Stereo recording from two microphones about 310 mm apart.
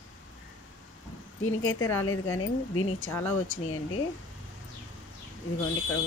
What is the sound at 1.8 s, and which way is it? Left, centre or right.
Speech, centre.